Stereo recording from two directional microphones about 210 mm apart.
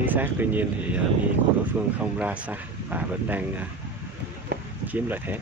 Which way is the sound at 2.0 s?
5° right (ahead or behind).